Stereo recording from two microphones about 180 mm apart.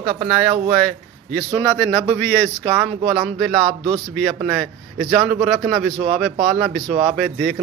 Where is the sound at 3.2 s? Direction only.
Centre (ahead or behind).